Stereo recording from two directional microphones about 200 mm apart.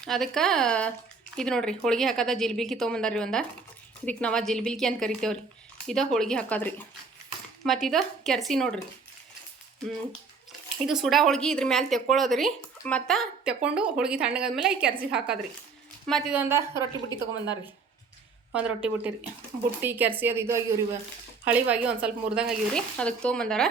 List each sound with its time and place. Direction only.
0.0 s speech: centre (ahead or behind)
10.8 s a woman's voice: centre (ahead or behind)
17.1 s speech: 20° left (ahead or behind)
18.5 s a woman's voice: 5° right (ahead or behind)